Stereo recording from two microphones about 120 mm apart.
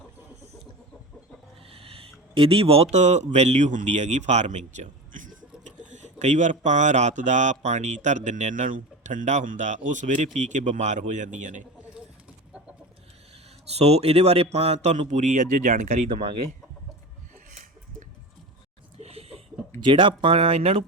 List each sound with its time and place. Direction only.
1.7 s a sound: 50° right (ahead or behind); by 3.2 s 75° right (ahead or behind)
3.3 s speech: 70° right (ahead or behind); by 5.7 s 90° right
5.9 s speech: 80° right
13.7 s a man's voice: 60° right (ahead or behind); by 16.0 s 80° right
18.9 s a sound: 60° right (ahead or behind)
19.8 s speech: 45° right (ahead or behind)